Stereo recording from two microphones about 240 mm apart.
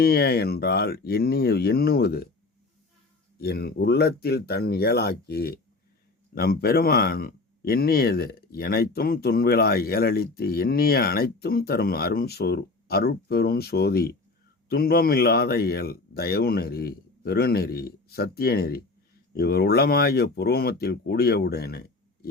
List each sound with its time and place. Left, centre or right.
0.0 s speech: left
3.3 s speech: left